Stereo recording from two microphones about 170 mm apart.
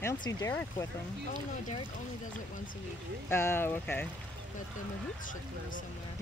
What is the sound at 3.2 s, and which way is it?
Speech, 15° left (ahead or behind).